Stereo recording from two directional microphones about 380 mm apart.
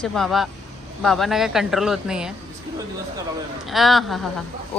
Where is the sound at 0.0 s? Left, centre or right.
Centre.